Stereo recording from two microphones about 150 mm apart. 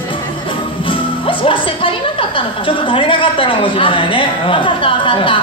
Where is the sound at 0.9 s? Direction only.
35° left (ahead or behind).